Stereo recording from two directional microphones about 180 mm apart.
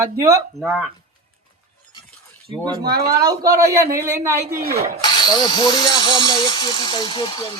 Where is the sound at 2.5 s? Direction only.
20° right (ahead or behind).